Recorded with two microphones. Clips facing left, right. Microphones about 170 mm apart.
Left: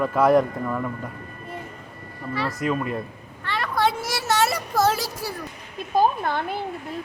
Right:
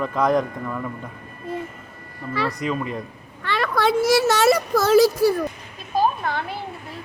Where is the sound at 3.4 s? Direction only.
90° right.